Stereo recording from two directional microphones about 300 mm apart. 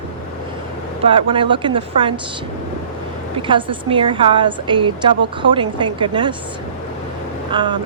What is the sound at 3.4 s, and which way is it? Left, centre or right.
A woman's voice, centre.